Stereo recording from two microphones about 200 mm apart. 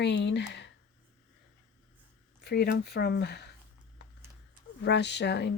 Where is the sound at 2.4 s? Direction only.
50° left (ahead or behind).